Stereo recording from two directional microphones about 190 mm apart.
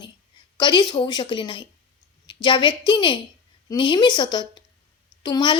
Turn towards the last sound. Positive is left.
turn(degrees=25)  # may be behind; listen again after turning